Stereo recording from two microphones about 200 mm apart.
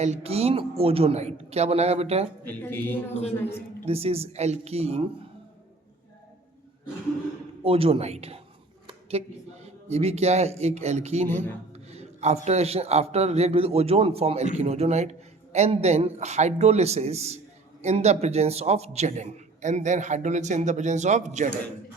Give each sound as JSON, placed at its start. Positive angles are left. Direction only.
{"t": 0.0, "sound": "a man's voice", "side_deg": -30}
{"t": 2.5, "sound": "speech", "side_deg": 10}
{"t": 3.8, "sound": "a man's voice", "side_deg": -30}
{"t": 7.6, "sound": "a man's voice", "side_deg": -30}
{"t": 8.9, "sound": "a sound", "side_deg": -30}
{"t": 9.9, "sound": "a man's voice", "side_deg": -30}